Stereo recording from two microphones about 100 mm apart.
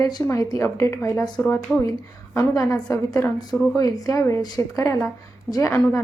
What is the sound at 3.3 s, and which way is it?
A woman's voice, 45° left (ahead or behind).